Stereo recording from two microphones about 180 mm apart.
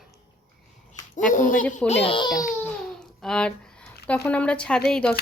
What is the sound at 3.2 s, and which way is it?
Speech, 5° left (ahead or behind).